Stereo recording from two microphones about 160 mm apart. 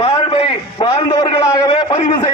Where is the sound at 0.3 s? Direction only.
35° left (ahead or behind).